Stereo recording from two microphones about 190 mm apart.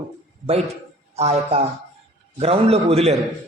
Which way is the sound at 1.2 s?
35° right (ahead or behind).